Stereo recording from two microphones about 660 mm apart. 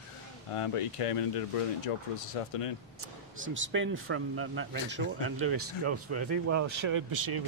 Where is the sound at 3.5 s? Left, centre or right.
Centre.